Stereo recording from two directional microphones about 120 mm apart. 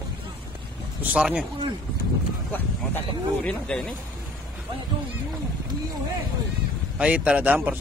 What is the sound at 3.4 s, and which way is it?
Speech, 5° left (ahead or behind).